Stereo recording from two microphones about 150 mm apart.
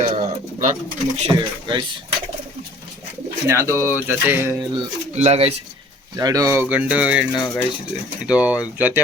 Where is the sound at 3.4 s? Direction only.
20° right (ahead or behind).